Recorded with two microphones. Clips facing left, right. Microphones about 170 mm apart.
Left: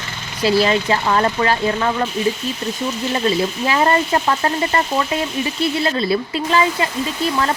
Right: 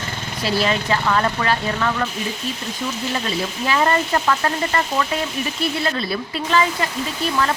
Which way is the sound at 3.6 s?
30° left (ahead or behind).